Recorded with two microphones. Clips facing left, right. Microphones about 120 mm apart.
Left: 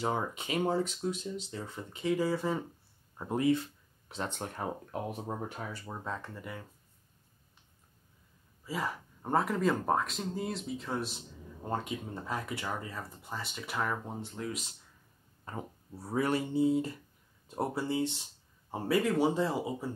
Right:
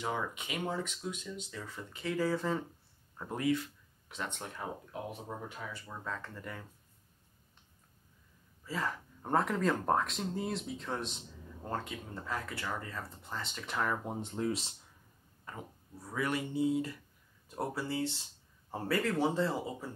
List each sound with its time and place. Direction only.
0.0 s speech: 35° left (ahead or behind); by 2.6 s 10° left (ahead or behind)
3.2 s speech: 25° left (ahead or behind)
6.0 s speech: 20° left (ahead or behind)
8.6 s speech: 10° left (ahead or behind)
11.7 s speech: 20° left (ahead or behind)
14.0 s speech: 20° right (ahead or behind)
15.4 s speech: 35° left (ahead or behind); by 19.5 s 15° left (ahead or behind)